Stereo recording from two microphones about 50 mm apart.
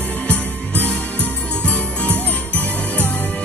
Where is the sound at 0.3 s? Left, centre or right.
Left.